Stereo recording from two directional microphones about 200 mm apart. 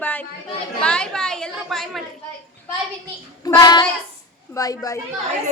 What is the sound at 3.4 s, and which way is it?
Child singing, 20° left (ahead or behind).